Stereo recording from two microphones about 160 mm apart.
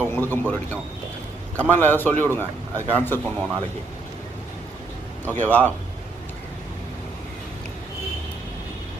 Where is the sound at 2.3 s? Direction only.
15° right (ahead or behind).